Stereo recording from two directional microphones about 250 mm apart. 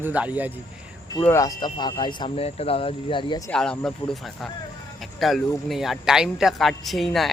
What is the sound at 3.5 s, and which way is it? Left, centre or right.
Speech, centre.